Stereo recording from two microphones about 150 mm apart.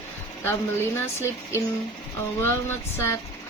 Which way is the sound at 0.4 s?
15° left (ahead or behind).